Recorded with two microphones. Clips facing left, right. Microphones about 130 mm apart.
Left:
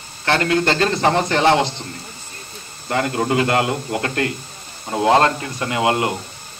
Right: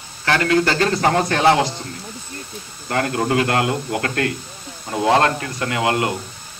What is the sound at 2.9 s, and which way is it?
Speech, 25° left (ahead or behind).